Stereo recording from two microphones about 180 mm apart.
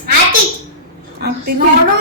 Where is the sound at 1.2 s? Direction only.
60° right (ahead or behind).